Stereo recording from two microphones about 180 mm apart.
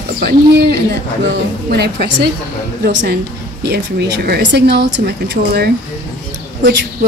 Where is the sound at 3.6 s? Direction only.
65° right (ahead or behind).